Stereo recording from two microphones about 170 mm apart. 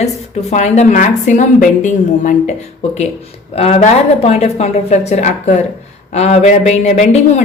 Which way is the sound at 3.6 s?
35° left (ahead or behind).